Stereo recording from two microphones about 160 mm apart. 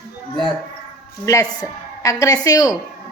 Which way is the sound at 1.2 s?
20° left (ahead or behind).